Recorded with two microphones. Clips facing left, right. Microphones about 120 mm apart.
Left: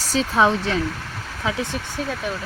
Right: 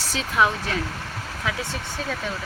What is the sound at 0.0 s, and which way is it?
Speech, 35° left (ahead or behind).